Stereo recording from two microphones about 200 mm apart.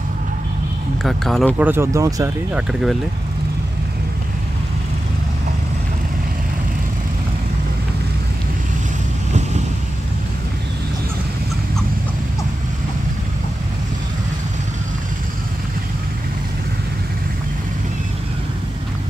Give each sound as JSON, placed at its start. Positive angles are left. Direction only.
{"t": 1.0, "sound": "speech", "side_deg": 0}
{"t": 1.7, "sound": "speech", "side_deg": -15}
{"t": 2.5, "sound": "speech", "side_deg": 0}